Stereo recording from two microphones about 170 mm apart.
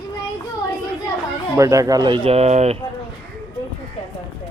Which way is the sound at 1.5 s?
20° right (ahead or behind).